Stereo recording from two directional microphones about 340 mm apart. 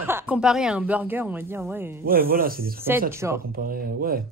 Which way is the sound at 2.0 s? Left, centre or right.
Right.